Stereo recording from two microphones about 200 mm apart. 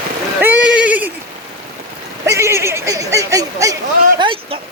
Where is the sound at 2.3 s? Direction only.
15° right (ahead or behind).